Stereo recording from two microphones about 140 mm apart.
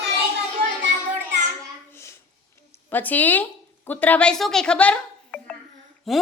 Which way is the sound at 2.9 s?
10° left (ahead or behind).